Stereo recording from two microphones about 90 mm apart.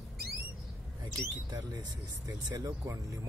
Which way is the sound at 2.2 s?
40° right (ahead or behind).